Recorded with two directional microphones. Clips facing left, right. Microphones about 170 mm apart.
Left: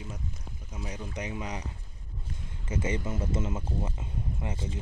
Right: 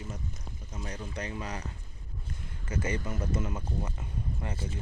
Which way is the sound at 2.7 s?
25° left (ahead or behind).